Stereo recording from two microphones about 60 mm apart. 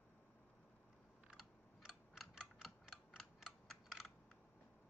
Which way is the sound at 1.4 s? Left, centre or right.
Centre.